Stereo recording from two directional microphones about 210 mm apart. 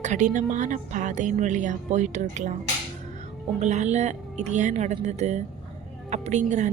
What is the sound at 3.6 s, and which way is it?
Speech, 35° right (ahead or behind).